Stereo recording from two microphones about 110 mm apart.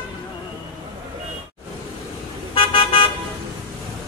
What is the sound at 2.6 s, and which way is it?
Car, 55° left (ahead or behind).